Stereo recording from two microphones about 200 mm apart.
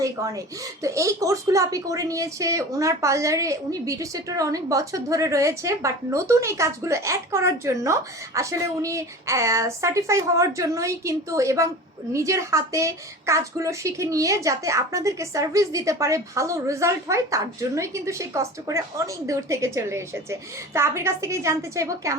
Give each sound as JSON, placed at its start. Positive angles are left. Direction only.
{"t": 0.0, "sound": "a woman's voice", "side_deg": -15}